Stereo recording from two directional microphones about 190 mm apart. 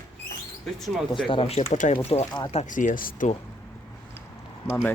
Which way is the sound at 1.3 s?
30° left (ahead or behind).